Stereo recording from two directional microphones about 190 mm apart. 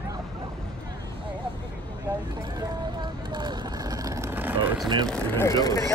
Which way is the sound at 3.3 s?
25° right (ahead or behind).